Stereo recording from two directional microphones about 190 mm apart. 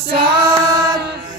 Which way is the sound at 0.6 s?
20° right (ahead or behind).